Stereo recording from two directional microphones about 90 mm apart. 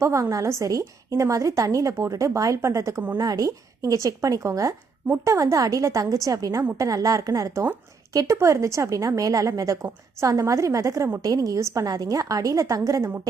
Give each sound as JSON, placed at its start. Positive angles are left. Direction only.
{"t": 0.0, "sound": "a woman's voice", "side_deg": -35}